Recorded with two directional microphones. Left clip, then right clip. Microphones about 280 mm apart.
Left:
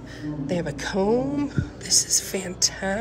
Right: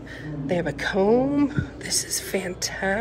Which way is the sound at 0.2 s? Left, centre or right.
Centre.